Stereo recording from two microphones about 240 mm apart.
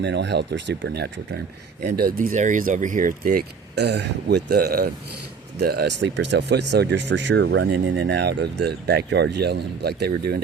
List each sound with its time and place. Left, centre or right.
0.0 s speech: right